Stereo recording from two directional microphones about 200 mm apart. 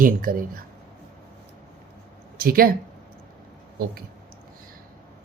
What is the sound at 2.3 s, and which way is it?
Speech, 50° right (ahead or behind).